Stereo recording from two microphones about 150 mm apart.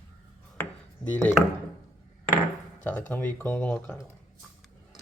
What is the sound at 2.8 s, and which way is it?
Speech, 10° left (ahead or behind).